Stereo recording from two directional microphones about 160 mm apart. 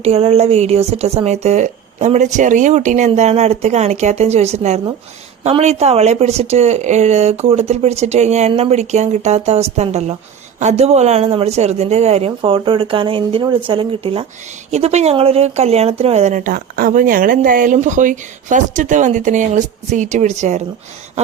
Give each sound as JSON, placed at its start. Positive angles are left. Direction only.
{"t": 0.0, "sound": "speech", "side_deg": -40}